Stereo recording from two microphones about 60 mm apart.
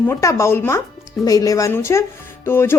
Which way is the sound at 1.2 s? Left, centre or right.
Left.